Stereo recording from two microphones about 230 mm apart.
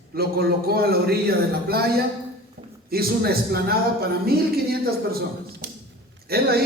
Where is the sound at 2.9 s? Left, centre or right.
Right.